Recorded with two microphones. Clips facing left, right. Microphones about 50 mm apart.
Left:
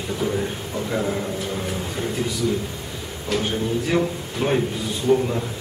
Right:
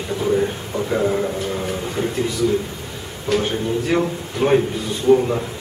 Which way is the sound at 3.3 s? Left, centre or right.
Centre.